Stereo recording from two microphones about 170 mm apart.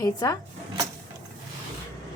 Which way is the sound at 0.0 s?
20° left (ahead or behind).